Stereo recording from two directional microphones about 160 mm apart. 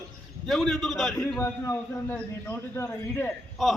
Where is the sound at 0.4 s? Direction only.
Centre (ahead or behind).